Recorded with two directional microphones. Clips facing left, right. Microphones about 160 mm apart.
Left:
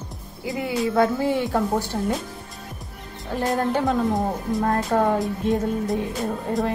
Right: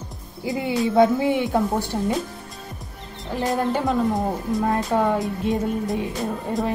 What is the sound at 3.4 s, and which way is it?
Speech, 5° right (ahead or behind).